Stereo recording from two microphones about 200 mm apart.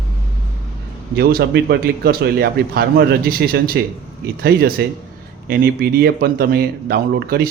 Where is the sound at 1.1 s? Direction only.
50° right (ahead or behind).